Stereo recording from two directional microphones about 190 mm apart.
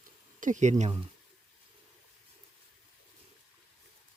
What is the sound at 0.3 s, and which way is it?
Speech, 40° right (ahead or behind).